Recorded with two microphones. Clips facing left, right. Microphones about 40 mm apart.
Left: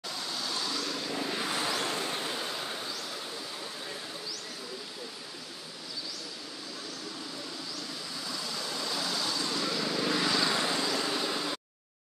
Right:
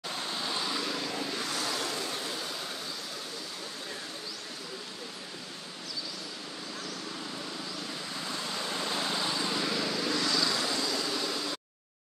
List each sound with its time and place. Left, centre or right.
0.1 s vehicle: right; by 1.1 s centre
1.3 s vehicle: left
8.3 s vehicle: right; by 9.8 s centre
9.8 s vehicle: centre
10.0 s vehicle: centre